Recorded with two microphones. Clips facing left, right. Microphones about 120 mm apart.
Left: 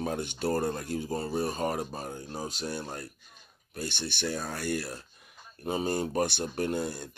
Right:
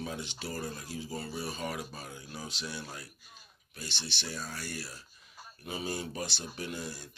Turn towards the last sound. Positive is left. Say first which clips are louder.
# left 9 dB
turn(degrees=55)  # may be behind; listen again after turning